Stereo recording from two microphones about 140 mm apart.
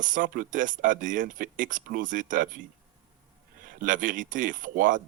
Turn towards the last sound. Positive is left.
turn(degrees=-75)  # may be behind; listen again after turning